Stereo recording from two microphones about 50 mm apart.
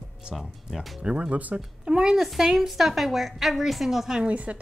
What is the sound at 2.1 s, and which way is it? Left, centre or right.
A woman's voice, centre.